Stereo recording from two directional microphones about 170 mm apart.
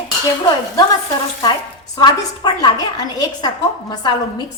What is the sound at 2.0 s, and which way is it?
A woman's voice, 25° left (ahead or behind).